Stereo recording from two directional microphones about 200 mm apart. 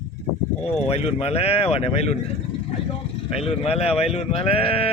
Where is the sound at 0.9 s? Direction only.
30° left (ahead or behind).